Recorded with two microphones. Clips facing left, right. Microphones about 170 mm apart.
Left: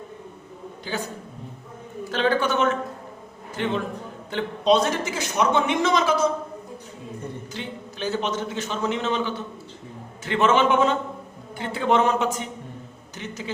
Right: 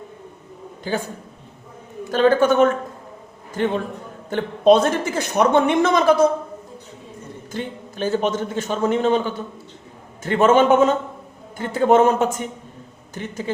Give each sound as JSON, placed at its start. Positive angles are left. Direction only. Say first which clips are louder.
{"t": 2.0, "sound": "a man's voice", "louder": "right 7 dB", "side_deg": -45}
{"t": 7.5, "sound": "a man's voice", "louder": "right 5 dB", "side_deg": -50}